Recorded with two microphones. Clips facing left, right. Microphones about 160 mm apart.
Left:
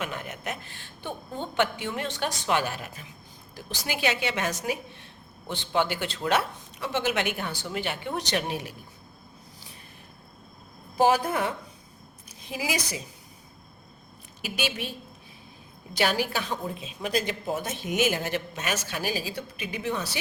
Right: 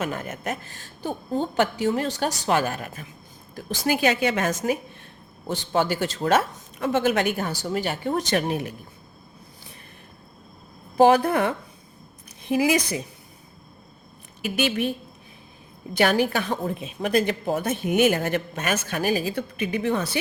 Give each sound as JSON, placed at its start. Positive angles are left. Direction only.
{"t": 0.0, "sound": "a woman's voice", "side_deg": -45}
{"t": 10.9, "sound": "a woman's voice", "side_deg": -60}
{"t": 14.4, "sound": "a woman's voice", "side_deg": -55}